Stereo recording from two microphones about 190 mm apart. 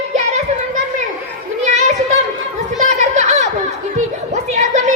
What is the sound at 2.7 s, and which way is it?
Children playing, 40° right (ahead or behind).